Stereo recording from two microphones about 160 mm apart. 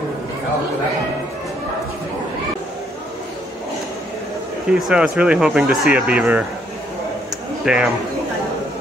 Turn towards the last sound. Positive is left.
turn(degrees=-5)  # may be behind; listen again after turning